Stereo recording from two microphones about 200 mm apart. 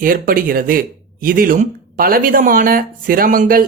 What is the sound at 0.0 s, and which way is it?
Speech, 45° right (ahead or behind).